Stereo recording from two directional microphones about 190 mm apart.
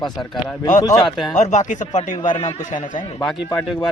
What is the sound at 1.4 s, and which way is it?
Speech, 40° left (ahead or behind).